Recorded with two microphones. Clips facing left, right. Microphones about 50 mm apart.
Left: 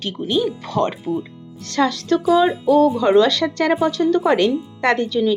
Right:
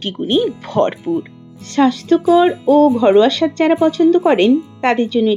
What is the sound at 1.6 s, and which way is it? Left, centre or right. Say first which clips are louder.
Speech: right 5 dB; centre.